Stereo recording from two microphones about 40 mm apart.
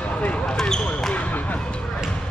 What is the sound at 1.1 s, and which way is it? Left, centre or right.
Basketball bounce, left.